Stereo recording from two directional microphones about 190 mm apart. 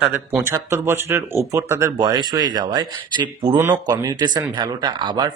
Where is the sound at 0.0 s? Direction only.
10° right (ahead or behind).